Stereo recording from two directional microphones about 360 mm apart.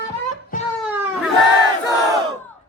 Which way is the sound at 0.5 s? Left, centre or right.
Left.